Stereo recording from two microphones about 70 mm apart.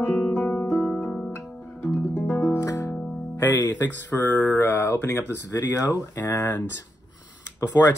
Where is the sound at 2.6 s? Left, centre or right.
Left.